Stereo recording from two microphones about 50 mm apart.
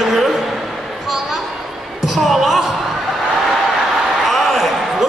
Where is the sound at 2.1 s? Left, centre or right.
Centre.